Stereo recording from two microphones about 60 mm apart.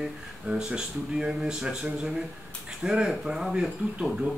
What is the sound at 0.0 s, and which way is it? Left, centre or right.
Speech, centre.